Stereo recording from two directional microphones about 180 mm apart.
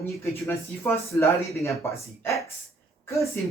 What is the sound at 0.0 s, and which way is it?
Speech, 15° left (ahead or behind).